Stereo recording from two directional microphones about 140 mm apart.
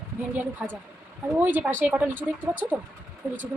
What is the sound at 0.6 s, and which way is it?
Speech, 5° right (ahead or behind).